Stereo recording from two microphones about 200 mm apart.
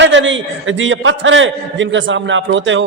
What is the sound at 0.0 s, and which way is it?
A man's voice, 70° right (ahead or behind).